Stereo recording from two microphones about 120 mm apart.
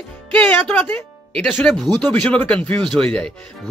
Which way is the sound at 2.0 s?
10° left (ahead or behind).